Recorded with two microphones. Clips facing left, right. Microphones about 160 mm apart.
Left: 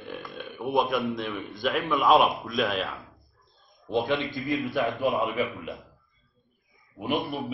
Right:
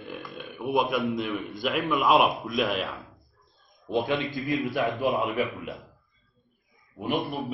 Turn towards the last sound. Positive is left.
turn(degrees=0)  # may be behind; listen again after turning